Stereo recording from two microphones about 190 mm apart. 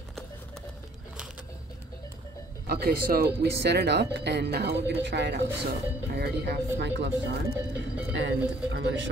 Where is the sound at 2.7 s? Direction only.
55° right (ahead or behind).